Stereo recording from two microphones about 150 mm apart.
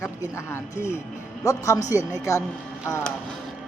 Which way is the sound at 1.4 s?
20° left (ahead or behind).